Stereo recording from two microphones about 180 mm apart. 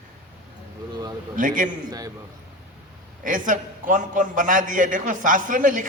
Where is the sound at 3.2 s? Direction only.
45° right (ahead or behind).